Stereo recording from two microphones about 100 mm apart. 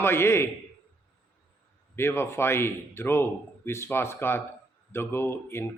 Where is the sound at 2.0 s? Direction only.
25° left (ahead or behind).